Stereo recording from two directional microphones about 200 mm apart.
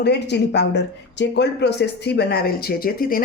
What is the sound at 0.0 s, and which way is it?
Speech, 60° left (ahead or behind).